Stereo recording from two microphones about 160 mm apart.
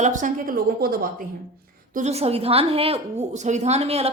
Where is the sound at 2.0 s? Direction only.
40° right (ahead or behind).